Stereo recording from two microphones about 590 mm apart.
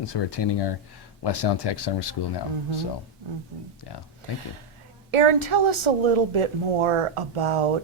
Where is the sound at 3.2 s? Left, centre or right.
Right.